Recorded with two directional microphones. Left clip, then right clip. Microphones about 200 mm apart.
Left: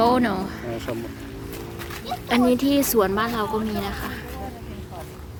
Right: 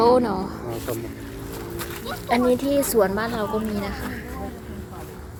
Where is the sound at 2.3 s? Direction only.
15° left (ahead or behind).